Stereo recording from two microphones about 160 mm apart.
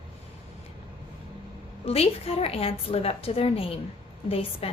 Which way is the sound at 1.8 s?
40° left (ahead or behind).